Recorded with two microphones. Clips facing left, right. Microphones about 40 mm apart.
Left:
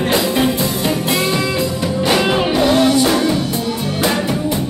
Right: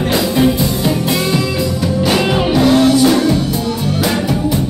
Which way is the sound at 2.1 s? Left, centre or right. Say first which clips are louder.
Even; centre.